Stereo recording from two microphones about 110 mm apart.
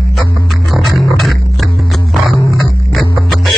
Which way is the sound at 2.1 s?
Centre (ahead or behind).